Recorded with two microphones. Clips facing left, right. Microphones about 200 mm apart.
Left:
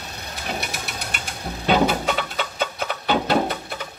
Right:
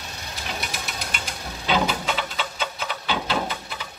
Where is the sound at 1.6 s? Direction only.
50° left (ahead or behind).